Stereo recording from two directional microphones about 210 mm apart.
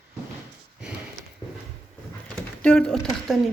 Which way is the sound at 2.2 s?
5° left (ahead or behind).